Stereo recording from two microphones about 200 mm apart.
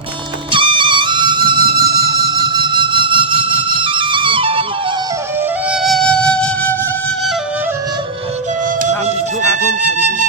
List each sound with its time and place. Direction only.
0.5 s music: 25° right (ahead or behind)
5.7 s music: centre (ahead or behind)